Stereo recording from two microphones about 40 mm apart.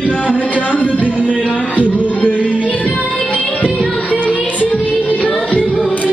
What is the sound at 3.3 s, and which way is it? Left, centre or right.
Music, left.